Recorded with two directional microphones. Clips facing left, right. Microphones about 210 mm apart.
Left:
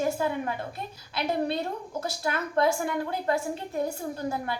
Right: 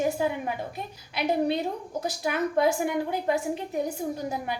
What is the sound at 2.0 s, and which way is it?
A woman's voice, 15° right (ahead or behind).